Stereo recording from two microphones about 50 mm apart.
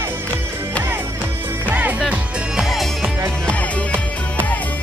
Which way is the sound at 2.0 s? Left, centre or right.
Centre.